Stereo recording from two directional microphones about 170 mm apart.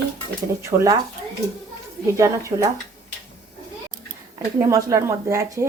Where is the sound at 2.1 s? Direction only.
15° right (ahead or behind).